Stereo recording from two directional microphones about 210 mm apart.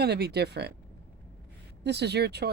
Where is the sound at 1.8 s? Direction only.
55° right (ahead or behind).